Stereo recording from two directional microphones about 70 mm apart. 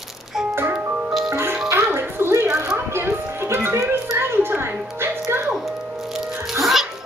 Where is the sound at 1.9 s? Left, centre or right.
Right.